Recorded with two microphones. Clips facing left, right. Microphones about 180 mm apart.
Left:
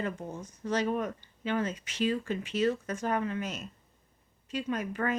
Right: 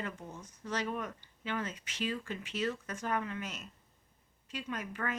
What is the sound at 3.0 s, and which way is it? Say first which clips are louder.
Speech: left 4 dB; 30° left (ahead or behind).